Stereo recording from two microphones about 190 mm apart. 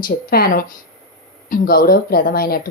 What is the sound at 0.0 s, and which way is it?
Speech, 50° left (ahead or behind).